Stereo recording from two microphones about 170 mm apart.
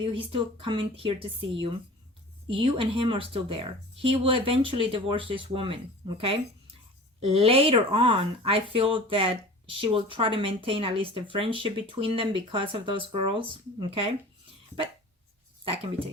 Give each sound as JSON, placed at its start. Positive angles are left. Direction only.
{"t": 0.0, "sound": "speech", "side_deg": -30}
{"t": 2.5, "sound": "speech", "side_deg": -30}
{"t": 15.6, "sound": "speech", "side_deg": -35}